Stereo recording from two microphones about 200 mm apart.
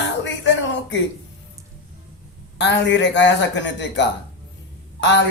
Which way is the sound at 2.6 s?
60° left (ahead or behind).